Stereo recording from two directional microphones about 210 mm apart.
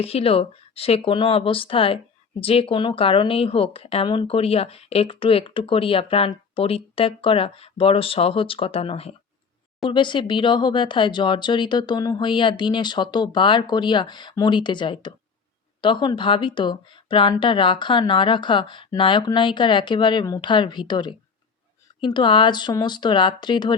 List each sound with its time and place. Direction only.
0.0 s a woman's voice: 30° left (ahead or behind)